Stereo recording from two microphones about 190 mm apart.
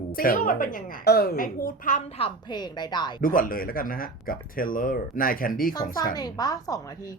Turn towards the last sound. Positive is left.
turn(degrees=20)  # may be behind; listen again after turning